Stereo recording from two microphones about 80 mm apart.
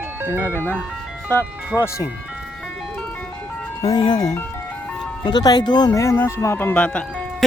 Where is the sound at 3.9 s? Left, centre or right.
Left.